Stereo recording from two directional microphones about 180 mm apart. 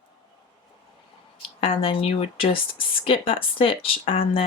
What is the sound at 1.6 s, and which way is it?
Speech, 30° left (ahead or behind).